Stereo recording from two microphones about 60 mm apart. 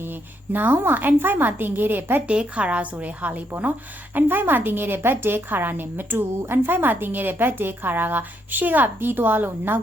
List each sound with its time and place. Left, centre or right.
0.5 s a woman's voice: right
2.2 s a woman's voice: centre